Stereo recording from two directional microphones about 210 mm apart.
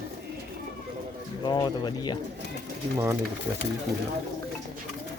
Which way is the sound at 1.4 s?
20° left (ahead or behind).